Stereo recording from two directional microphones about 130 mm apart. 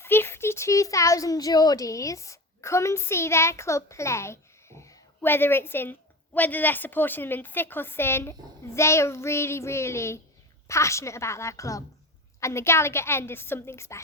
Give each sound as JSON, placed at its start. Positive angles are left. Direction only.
{"t": 0.0, "sound": "a woman's voice", "side_deg": 15}